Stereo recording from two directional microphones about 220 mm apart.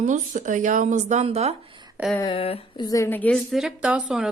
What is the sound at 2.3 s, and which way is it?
Speech, 25° left (ahead or behind).